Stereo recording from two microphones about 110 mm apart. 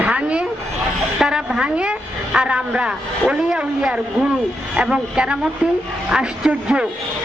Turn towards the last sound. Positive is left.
turn(degrees=-10)  # may be behind; listen again after turning